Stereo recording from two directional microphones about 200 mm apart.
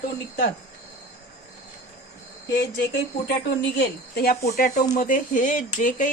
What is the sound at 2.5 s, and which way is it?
A woman's voice, 55° left (ahead or behind).